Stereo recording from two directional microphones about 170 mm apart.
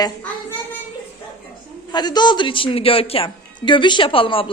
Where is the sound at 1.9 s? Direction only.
25° left (ahead or behind).